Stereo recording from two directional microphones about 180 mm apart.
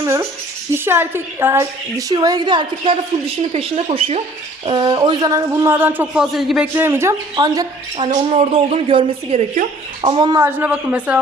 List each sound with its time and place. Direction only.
0.0 s a sound: 15° right (ahead or behind)
0.7 s a woman's voice: 15° right (ahead or behind)
6.7 s a woman's voice: 15° right (ahead or behind)
10.4 s a man's voice: 10° right (ahead or behind)